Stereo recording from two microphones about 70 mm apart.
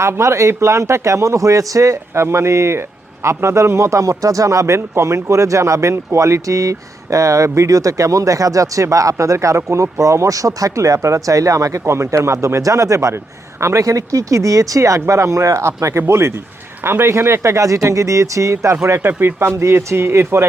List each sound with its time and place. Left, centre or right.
0.0 s speech: right
18.9 s speech: right